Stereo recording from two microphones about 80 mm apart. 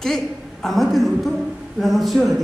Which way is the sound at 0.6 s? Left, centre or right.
Centre.